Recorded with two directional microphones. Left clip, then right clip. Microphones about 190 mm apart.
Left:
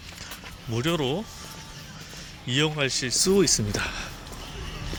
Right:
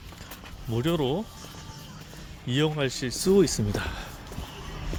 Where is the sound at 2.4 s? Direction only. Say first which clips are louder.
Left 2 dB; 25° right (ahead or behind).